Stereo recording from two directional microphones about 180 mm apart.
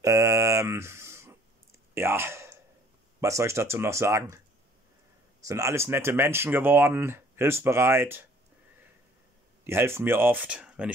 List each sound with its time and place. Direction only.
0.0 s a sound: 15° right (ahead or behind)
2.0 s speech: 15° right (ahead or behind)
5.5 s speech: 15° right (ahead or behind)
9.7 s speech: 15° right (ahead or behind)